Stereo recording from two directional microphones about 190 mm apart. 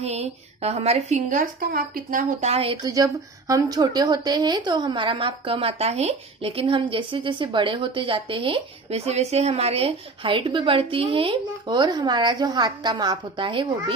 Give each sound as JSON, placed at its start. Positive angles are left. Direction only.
{"t": 0.0, "sound": "a woman's voice", "side_deg": -35}